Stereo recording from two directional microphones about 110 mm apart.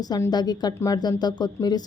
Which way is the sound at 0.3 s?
40° left (ahead or behind).